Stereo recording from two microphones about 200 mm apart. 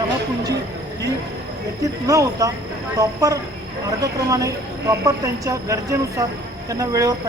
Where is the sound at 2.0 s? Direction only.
15° right (ahead or behind).